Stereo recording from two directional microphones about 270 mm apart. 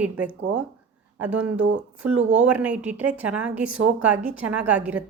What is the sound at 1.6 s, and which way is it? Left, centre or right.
Speech, right.